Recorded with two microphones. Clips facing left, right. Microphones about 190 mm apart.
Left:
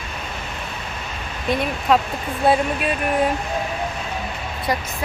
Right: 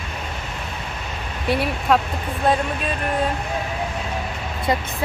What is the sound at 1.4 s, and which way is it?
Speech, 5° right (ahead or behind).